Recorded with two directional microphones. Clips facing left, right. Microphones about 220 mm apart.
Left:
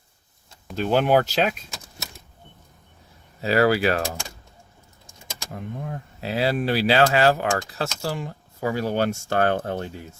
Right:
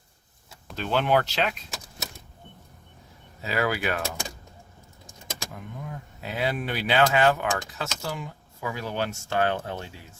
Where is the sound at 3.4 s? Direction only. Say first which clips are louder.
Left 8 dB; 35° left (ahead or behind).